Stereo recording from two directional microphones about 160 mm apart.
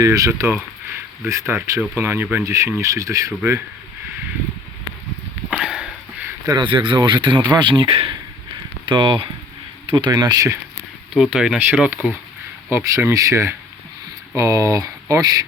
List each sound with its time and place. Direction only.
0.0 s speech: 20° right (ahead or behind)
5.5 s sniff: 5° right (ahead or behind)
6.5 s speech: 30° right (ahead or behind)
11.1 s speech: 5° right (ahead or behind); by 14.8 s 20° right (ahead or behind)